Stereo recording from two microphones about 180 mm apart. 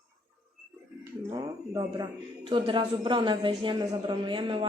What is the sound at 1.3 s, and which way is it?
Speech, 25° right (ahead or behind).